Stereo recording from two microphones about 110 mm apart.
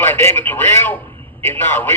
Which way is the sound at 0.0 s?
20° left (ahead or behind).